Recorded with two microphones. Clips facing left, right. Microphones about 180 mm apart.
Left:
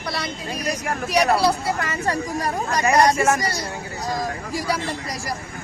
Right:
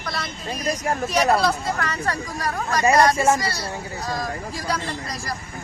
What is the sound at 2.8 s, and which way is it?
Speech, 25° right (ahead or behind).